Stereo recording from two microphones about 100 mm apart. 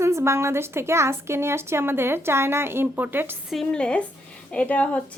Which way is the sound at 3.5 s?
5° left (ahead or behind).